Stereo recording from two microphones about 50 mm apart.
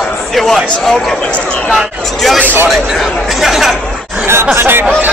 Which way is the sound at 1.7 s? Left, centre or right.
Centre.